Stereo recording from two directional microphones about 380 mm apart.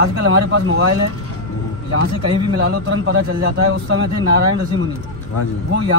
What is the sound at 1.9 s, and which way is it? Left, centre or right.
Speech, right.